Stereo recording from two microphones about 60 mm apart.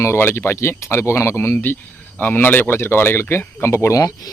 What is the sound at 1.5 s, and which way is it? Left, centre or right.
Speech, left.